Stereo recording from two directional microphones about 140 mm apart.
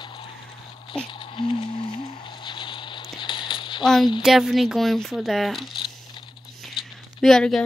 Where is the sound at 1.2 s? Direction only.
40° left (ahead or behind).